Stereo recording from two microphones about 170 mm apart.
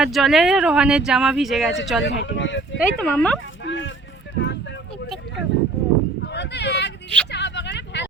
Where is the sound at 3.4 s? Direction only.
90° left.